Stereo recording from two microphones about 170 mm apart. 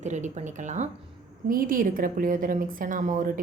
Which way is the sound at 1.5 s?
55° right (ahead or behind).